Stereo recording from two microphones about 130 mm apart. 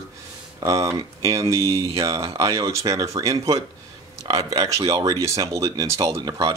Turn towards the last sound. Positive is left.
turn(degrees=-25)  # may be behind; listen again after turning